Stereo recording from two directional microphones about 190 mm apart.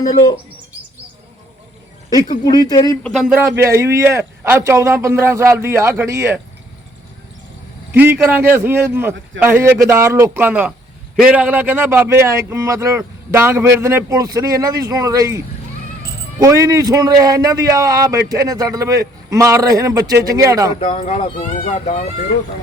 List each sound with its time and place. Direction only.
2.3 s speech: 20° left (ahead or behind)
3.0 s a man's voice: centre (ahead or behind)
7.9 s a man's voice: 10° right (ahead or behind)
20.7 s speech: 40° left (ahead or behind)